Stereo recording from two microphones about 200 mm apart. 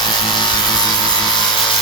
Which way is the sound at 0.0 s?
20° left (ahead or behind).